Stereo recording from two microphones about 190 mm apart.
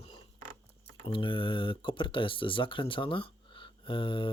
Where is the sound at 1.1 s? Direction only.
25° left (ahead or behind).